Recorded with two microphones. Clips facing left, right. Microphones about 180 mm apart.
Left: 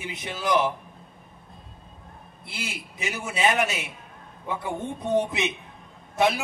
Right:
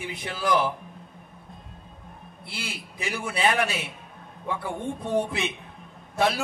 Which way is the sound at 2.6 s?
20° left (ahead or behind).